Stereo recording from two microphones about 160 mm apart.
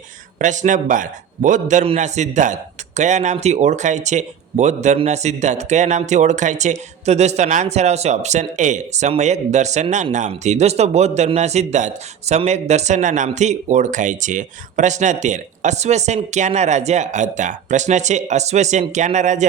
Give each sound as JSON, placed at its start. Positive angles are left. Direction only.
{"t": 0.3, "sound": "a man's voice", "side_deg": -50}